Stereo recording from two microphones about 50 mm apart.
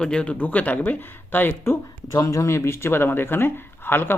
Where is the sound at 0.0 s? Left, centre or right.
Centre; by 1.8 s left.